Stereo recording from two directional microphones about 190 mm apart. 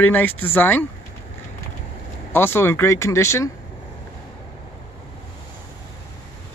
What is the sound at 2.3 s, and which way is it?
Speech, 10° left (ahead or behind).